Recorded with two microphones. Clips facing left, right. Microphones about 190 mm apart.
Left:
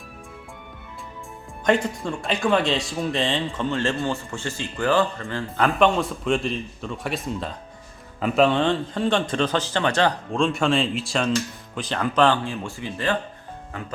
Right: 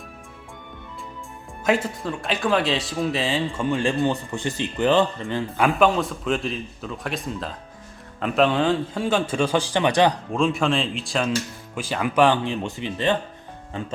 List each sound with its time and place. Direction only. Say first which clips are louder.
1.6 s a man's voice: left 1 dB; 5° right (ahead or behind); by 13.9 s 25° right (ahead or behind)